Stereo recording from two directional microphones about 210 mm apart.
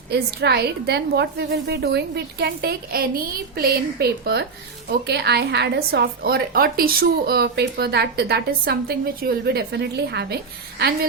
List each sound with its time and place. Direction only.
0.1 s a woman's voice: 50° right (ahead or behind)